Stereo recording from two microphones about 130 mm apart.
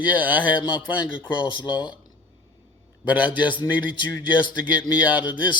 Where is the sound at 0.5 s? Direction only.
35° left (ahead or behind).